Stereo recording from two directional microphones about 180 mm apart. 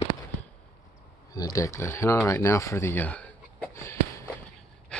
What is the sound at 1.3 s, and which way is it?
Speech, 20° left (ahead or behind).